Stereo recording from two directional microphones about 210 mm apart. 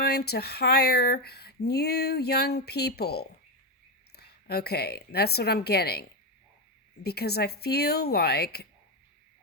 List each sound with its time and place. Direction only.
0.0 s speech: 50° left (ahead or behind)